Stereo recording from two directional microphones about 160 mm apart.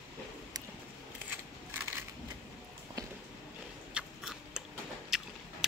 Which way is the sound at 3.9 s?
5° right (ahead or behind).